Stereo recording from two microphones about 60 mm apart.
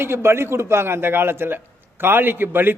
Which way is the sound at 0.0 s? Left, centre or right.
Right.